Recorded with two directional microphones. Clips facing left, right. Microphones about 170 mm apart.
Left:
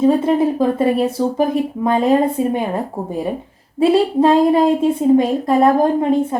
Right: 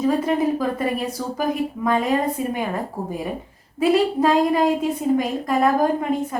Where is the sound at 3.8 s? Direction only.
30° left (ahead or behind).